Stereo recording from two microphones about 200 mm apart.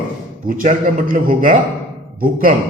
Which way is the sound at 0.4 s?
45° right (ahead or behind).